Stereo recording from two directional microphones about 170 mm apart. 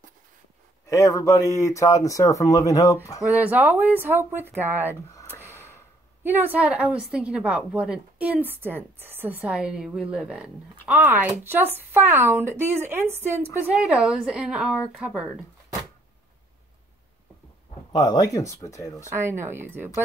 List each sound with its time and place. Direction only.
0.8 s speech: 20° left (ahead or behind)
3.2 s a woman's voice: 10° right (ahead or behind)
5.5 s a sound: 15° left (ahead or behind)
6.2 s a woman's voice: 10° right (ahead or behind)
17.9 s speech: 25° left (ahead or behind)
19.4 s a woman's voice: 15° right (ahead or behind)